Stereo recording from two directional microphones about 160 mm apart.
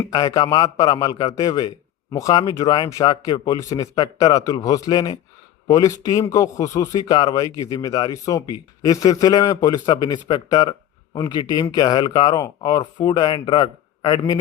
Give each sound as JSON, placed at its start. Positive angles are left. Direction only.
{"t": 0.1, "sound": "a man's voice", "side_deg": 25}